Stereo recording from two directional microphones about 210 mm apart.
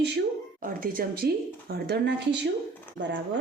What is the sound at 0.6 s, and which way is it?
A woman's voice, 45° right (ahead or behind).